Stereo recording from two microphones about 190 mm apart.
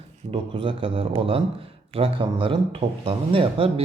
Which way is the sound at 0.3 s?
25° right (ahead or behind).